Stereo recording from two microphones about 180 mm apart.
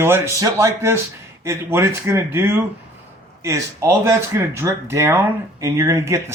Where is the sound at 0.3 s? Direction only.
20° right (ahead or behind).